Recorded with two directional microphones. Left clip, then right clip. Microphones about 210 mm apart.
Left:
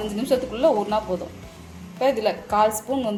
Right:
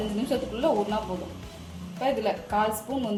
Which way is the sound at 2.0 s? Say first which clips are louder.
Left 5 dB; 35° left (ahead or behind).